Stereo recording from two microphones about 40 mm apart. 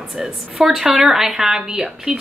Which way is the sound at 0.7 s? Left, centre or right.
Centre.